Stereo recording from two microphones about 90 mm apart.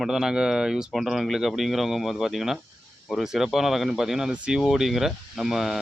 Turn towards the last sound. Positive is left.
turn(degrees=-5)  # may be behind; listen again after turning